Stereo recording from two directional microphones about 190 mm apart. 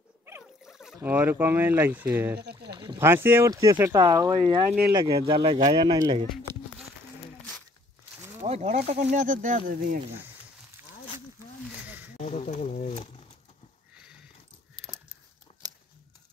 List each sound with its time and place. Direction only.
0.7 s speech: centre (ahead or behind)
2.7 s rowboat: 25° right (ahead or behind)
3.0 s speech: 10° right (ahead or behind)
8.5 s speech: 40° right (ahead or behind)
12.2 s a sound: 40° left (ahead or behind)